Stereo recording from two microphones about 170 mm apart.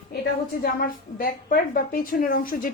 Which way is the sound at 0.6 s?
60° left (ahead or behind).